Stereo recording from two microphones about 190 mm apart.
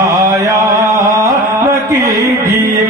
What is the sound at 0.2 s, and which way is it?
Mantra, 15° right (ahead or behind).